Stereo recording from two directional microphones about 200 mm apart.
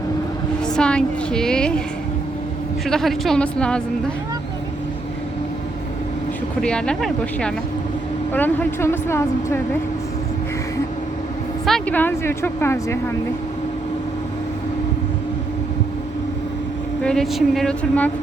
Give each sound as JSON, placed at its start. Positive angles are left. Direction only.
{"t": 0.6, "sound": "a woman's voice", "side_deg": 5}
{"t": 2.8, "sound": "a woman's voice", "side_deg": 0}
{"t": 6.6, "sound": "a woman's voice", "side_deg": 5}
{"t": 11.6, "sound": "speech", "side_deg": 5}
{"t": 17.0, "sound": "a woman's voice", "side_deg": 5}